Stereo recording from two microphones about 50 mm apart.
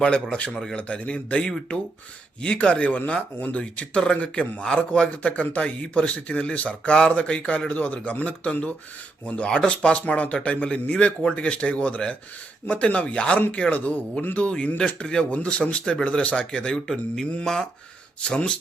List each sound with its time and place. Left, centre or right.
0.0 s a man's voice: left